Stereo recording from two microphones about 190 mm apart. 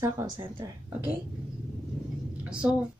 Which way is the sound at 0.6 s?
20° right (ahead or behind).